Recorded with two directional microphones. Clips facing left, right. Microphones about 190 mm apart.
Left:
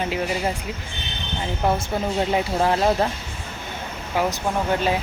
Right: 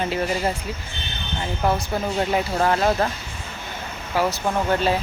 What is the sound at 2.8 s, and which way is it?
Speech, 5° left (ahead or behind).